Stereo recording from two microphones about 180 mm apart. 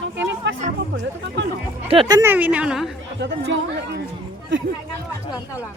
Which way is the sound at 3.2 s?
80° right.